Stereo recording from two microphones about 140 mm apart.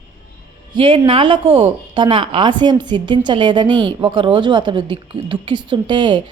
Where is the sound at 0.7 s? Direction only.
40° right (ahead or behind).